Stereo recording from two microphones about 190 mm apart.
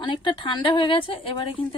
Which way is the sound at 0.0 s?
25° left (ahead or behind).